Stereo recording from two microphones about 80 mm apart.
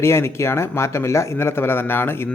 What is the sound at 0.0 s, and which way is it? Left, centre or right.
Speech, left.